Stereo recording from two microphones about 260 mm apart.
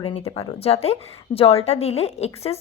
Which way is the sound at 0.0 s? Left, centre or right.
Left.